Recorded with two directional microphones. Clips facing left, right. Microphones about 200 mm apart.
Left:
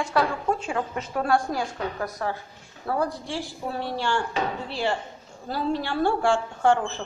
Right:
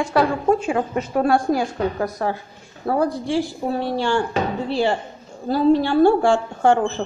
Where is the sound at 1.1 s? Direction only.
25° right (ahead or behind).